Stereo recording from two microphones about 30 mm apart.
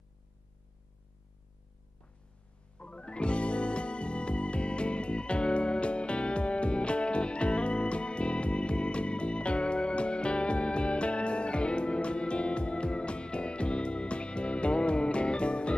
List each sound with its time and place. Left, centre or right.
2.8 s music: left